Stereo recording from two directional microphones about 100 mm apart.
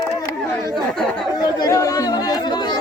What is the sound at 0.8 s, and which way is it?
Chatter, 5° left (ahead or behind).